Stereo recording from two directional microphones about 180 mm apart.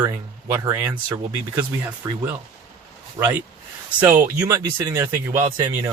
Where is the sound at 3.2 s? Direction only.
20° right (ahead or behind).